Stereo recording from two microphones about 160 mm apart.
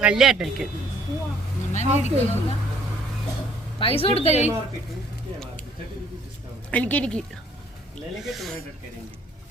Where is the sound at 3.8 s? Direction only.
35° left (ahead or behind).